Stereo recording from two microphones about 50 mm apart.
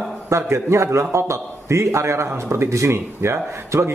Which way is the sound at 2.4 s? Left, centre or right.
Right.